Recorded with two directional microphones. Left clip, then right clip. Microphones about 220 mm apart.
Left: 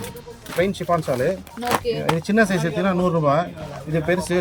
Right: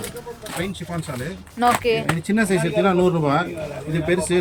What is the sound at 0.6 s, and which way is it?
Speech, 25° left (ahead or behind).